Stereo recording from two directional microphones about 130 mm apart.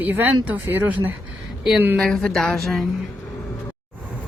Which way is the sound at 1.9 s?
5° left (ahead or behind).